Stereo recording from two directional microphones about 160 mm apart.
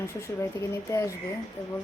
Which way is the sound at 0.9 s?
20° left (ahead or behind).